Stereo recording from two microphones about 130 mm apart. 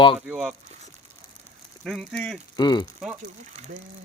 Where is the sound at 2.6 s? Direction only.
35° left (ahead or behind).